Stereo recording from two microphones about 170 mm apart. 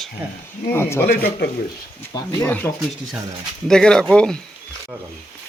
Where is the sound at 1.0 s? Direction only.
60° left (ahead or behind).